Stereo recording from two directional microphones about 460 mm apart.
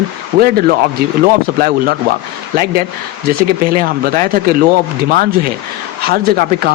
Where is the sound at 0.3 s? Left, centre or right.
Centre.